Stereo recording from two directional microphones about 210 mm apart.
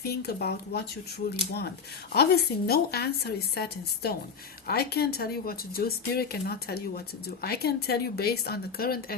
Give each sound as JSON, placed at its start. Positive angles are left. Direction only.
{"t": 0.0, "sound": "speech", "side_deg": 50}